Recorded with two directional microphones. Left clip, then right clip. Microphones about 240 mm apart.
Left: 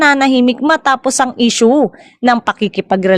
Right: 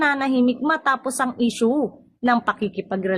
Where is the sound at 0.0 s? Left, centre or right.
Left.